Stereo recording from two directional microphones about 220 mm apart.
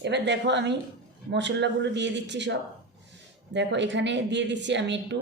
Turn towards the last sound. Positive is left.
turn(degrees=-55)  # may be behind; listen again after turning